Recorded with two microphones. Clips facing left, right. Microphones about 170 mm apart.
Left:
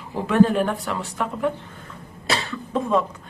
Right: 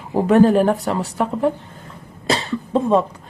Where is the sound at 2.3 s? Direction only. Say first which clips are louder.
Right 5 dB; 30° right (ahead or behind).